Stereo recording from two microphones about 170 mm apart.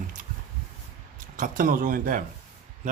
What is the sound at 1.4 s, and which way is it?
Speech, 55° right (ahead or behind).